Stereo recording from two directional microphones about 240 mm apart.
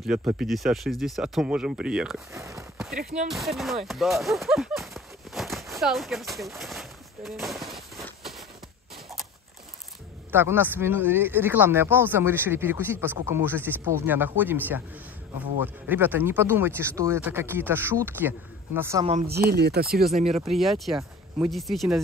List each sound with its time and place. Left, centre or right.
0.0 s speech: centre
2.3 s walk: centre
3.3 s speech: centre
6.6 s a sound: centre
10.3 s speech: centre
15.9 s speech: centre
19.2 s speech: right
20.2 s speech: right
20.4 s speech: centre